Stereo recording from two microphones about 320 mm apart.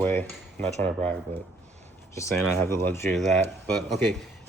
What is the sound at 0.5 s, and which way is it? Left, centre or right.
Cutlery, right.